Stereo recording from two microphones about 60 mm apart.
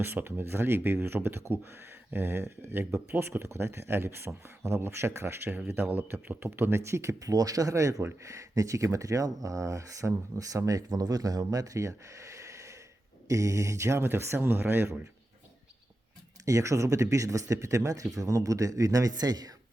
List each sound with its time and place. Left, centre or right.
0.0 s speech: right
5.7 s speech: right
7.2 s speech: right
10.7 s speech: right
16.5 s speech: right